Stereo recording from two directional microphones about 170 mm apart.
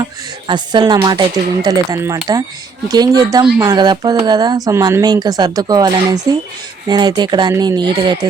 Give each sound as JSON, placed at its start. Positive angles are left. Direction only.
{"t": 0.0, "sound": "speech", "side_deg": -25}